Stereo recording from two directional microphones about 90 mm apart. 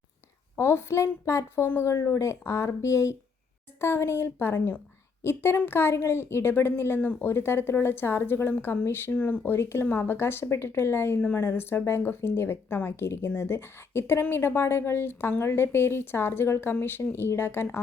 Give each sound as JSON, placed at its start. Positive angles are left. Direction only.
{"t": 0.5, "sound": "a woman's voice", "side_deg": 30}